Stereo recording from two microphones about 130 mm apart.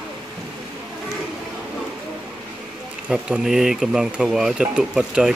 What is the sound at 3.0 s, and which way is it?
Speech, 5° right (ahead or behind).